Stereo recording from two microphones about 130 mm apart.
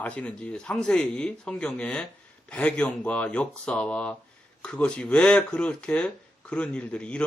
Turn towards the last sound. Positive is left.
turn(degrees=10)  # may be behind; listen again after turning